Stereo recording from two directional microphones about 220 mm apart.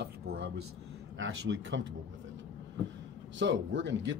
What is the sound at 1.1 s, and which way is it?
Speech, 60° right (ahead or behind).